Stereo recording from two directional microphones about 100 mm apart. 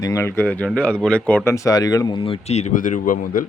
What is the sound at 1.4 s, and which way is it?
Speech, 30° left (ahead or behind).